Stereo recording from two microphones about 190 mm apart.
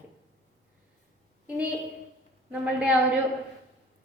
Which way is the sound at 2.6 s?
5° right (ahead or behind).